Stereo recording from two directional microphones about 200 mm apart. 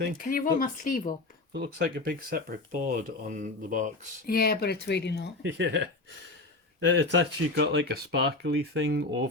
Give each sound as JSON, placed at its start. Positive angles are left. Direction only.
{"t": 0.2, "sound": "speech", "side_deg": 45}
{"t": 1.5, "sound": "speech", "side_deg": -55}
{"t": 2.9, "sound": "speech", "side_deg": -40}
{"t": 4.3, "sound": "speech", "side_deg": 50}
{"t": 5.4, "sound": "speech", "side_deg": -65}
{"t": 6.8, "sound": "speech", "side_deg": -65}